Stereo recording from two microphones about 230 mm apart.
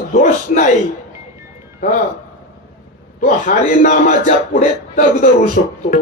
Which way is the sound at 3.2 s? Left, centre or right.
Left.